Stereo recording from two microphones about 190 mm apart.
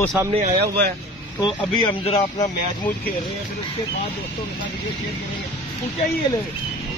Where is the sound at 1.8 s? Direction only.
30° left (ahead or behind).